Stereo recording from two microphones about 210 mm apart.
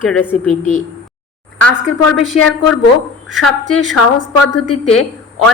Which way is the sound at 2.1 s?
Centre (ahead or behind).